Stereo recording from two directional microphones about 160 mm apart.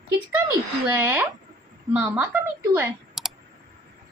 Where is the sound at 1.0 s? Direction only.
15° right (ahead or behind).